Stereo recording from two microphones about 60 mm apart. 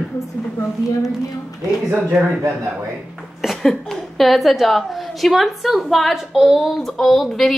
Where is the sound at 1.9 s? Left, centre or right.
Right.